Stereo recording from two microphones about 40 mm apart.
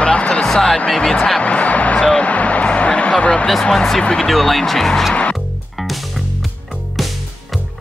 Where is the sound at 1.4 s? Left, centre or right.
Left.